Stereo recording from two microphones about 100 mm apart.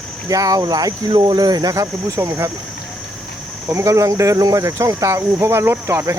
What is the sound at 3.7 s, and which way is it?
Speech, 30° right (ahead or behind).